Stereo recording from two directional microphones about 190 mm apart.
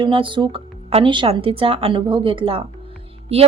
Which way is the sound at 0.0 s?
25° right (ahead or behind).